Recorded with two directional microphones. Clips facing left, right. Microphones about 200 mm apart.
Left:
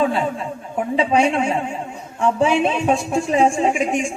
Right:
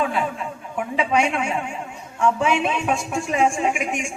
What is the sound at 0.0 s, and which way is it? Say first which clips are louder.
A woman's voice: left 4 dB; 30° left (ahead or behind).